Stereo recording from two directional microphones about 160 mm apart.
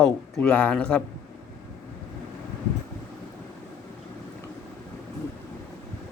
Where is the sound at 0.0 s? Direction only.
5° left (ahead or behind).